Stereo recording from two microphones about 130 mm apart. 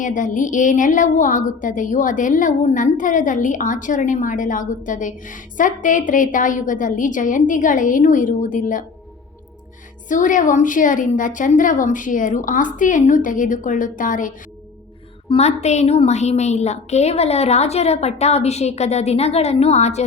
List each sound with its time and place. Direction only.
0.0 s a woman's voice: 85° left
10.1 s a woman's voice: 85° left
15.4 s a woman's voice: 60° left (ahead or behind)